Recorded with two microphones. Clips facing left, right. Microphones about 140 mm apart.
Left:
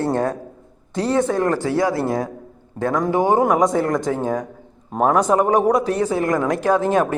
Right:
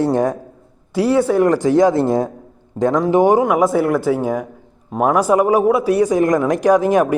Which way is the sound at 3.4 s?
5° right (ahead or behind).